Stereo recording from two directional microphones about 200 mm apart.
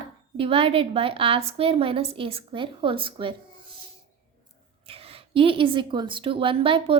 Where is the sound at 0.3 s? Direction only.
30° right (ahead or behind).